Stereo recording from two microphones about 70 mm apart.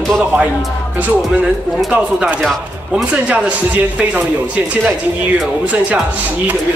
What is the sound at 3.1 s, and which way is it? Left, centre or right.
Speech, centre.